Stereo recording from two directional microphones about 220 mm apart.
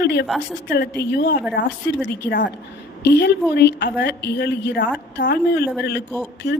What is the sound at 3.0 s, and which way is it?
A woman's voice, 50° left (ahead or behind).